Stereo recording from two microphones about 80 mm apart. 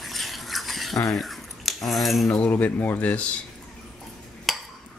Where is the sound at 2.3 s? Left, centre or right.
Centre.